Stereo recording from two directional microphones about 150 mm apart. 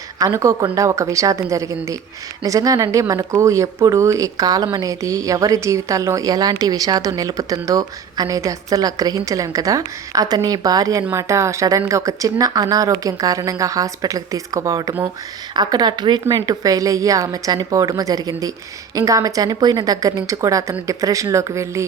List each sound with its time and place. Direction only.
0.2 s speech: 20° right (ahead or behind)